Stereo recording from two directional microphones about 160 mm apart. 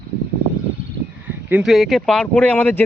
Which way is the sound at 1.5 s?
Centre (ahead or behind).